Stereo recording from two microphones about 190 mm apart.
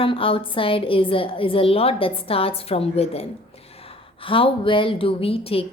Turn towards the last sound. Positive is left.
turn(degrees=30)  # may be behind; listen again after turning